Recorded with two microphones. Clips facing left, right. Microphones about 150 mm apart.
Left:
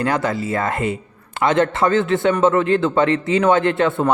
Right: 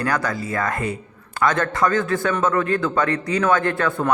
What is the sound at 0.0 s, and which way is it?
Speech, 25° left (ahead or behind).